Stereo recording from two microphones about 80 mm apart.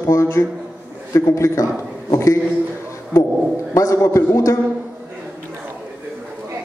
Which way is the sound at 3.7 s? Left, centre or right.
Left.